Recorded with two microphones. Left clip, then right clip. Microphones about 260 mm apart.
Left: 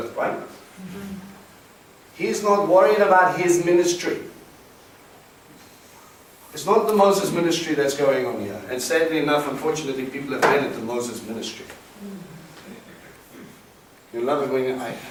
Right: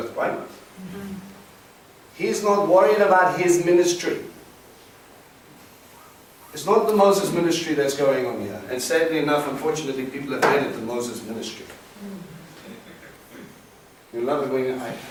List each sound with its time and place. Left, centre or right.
0.0 s a sound: centre
2.1 s speech: centre
2.4 s a man's voice: centre
2.7 s speech: centre
7.0 s a man's voice: centre
10.8 s a man's voice: centre
11.0 s speech: centre
14.2 s a man's voice: centre